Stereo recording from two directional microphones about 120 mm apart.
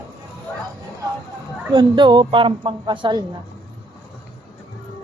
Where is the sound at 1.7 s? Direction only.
40° right (ahead or behind).